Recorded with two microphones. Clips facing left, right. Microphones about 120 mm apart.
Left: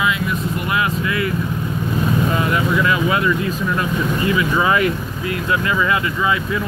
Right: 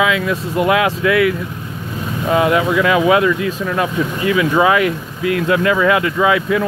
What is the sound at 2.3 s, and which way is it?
Speech, 90° right.